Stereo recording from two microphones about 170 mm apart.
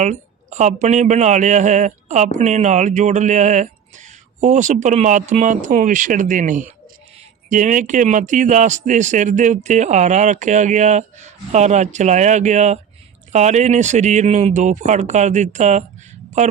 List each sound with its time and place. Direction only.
0.0 s a man's voice: 45° right (ahead or behind)